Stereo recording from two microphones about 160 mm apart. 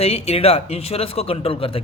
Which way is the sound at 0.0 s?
40° left (ahead or behind).